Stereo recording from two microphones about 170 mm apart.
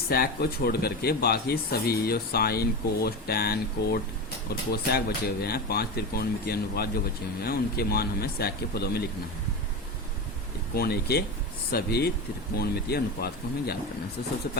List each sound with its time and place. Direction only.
0.1 s speech: 65° left (ahead or behind)
10.8 s speech: 70° left (ahead or behind)